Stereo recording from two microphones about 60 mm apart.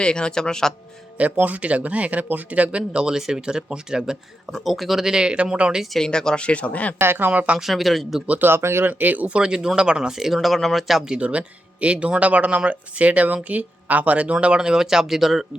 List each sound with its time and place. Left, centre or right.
0.0 s speech: centre
1.2 s speech: right
6.0 s speech: centre
7.0 s speech: right
7.3 s speech: right
7.6 s speech: centre
8.3 s speech: right
8.9 s speech: right; by 11.1 s centre
11.1 s speech: right; by 15.4 s centre